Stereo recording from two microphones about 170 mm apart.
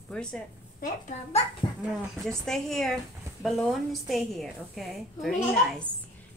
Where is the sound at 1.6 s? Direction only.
30° left (ahead or behind).